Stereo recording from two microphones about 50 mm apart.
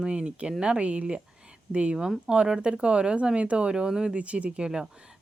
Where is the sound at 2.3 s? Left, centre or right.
Centre.